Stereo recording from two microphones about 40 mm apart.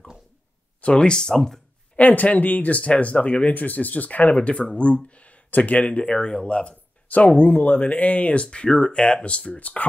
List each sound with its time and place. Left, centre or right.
0.7 s speech: left
1.3 s speech: centre
2.0 s speech: left
3.4 s speech: left
4.4 s speech: left
6.0 s speech: left
8.5 s speech: centre; by 9.8 s left